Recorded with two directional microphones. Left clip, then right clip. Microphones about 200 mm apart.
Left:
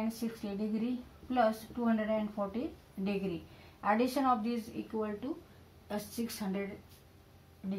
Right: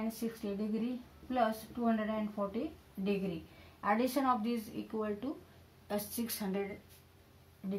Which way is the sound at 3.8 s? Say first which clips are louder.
Left 2 dB; 30° right (ahead or behind).